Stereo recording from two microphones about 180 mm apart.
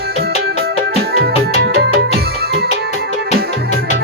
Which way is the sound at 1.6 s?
60° right (ahead or behind).